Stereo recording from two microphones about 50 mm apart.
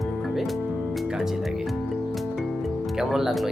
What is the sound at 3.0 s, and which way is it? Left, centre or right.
Speech, centre.